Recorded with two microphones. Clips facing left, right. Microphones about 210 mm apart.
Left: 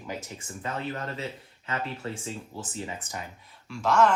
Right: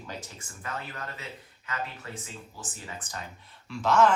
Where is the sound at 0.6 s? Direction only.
30° left (ahead or behind).